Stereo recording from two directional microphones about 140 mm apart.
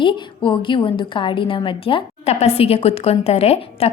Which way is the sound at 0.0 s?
35° left (ahead or behind).